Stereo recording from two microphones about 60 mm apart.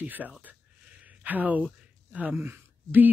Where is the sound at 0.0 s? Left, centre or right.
Right.